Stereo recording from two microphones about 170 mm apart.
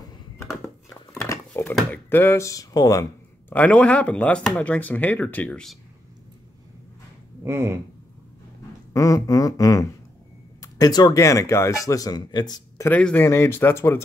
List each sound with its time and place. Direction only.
1.1 s a sound: 20° left (ahead or behind)
1.8 s speech: 10° left (ahead or behind)
3.5 s speech: 10° left (ahead or behind)
7.4 s speech: 15° right (ahead or behind)
8.9 s speech: 20° left (ahead or behind)
12.9 s speech: 10° left (ahead or behind)